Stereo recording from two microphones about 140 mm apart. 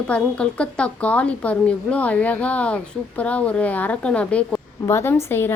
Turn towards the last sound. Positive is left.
turn(degrees=15)  # may be behind; listen again after turning